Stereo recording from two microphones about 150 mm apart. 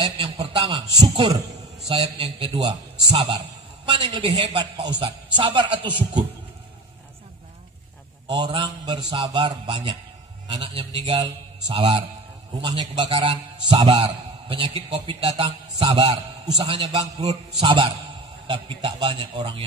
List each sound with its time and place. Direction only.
0.2 s a man's voice: 40° right (ahead or behind)
0.7 s a man's voice: 30° right (ahead or behind)
8.3 s a man's voice: 30° right (ahead or behind)